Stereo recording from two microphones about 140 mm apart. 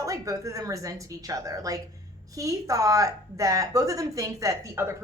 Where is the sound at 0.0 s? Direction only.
25° right (ahead or behind).